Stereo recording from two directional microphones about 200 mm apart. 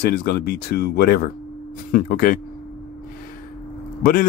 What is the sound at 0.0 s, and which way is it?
Speech, 50° left (ahead or behind).